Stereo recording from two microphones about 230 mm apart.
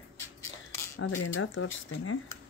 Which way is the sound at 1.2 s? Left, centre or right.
Left.